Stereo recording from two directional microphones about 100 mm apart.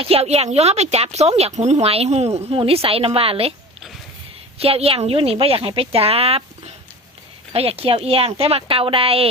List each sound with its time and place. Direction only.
0.0 s speech: 80° right
4.5 s a woman's voice: 85° right
7.5 s a woman's voice: 80° right